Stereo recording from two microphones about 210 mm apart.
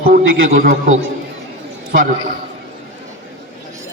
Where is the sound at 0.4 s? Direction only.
45° right (ahead or behind).